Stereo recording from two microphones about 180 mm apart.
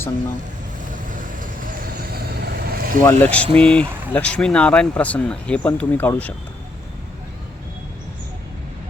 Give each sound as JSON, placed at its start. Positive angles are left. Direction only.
{"t": 1.1, "sound": "vehicle", "side_deg": -50}
{"t": 3.0, "sound": "speech", "side_deg": 10}